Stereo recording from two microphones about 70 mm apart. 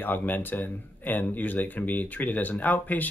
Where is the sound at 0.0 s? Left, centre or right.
Left.